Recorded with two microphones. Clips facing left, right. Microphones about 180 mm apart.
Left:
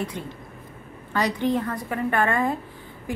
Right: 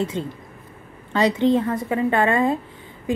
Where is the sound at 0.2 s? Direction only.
20° right (ahead or behind).